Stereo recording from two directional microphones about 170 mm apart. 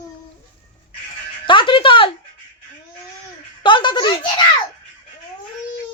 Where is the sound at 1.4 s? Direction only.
30° left (ahead or behind).